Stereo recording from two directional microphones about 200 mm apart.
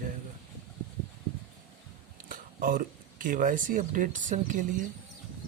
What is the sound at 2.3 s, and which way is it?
Speech, 45° right (ahead or behind).